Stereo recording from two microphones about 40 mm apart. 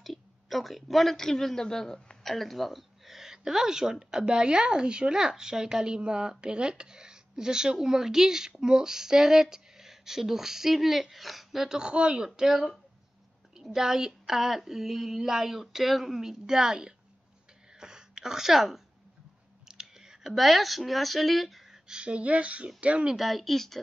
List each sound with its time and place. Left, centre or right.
0.0 s speech: centre
2.3 s speech: centre; by 5.1 s right
5.1 s a woman's voice: centre
11.8 s speech: right
12.4 s a woman's voice: centre
16.2 s a woman's voice: centre
17.7 s a sound: centre
19.7 s clicking: centre
20.3 s speech: centre
21.8 s speech: right
23.0 s speech: centre